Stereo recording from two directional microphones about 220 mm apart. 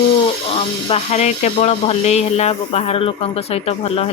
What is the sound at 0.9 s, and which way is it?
Speech, 30° left (ahead or behind).